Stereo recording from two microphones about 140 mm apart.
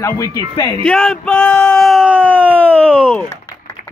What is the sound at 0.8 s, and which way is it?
Speech, 5° left (ahead or behind).